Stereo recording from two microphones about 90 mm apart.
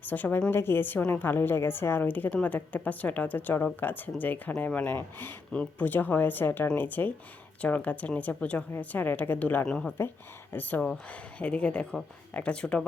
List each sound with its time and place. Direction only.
0.0 s a woman's voice: 20° left (ahead or behind)
9.6 s speech: 5° left (ahead or behind)
10.5 s a woman's voice: 20° left (ahead or behind)